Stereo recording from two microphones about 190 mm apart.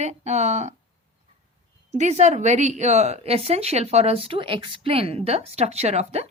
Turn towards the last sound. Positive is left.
turn(degrees=-35)  # may be behind; listen again after turning